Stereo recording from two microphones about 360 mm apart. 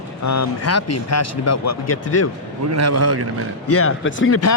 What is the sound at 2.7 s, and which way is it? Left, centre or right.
Speech, right.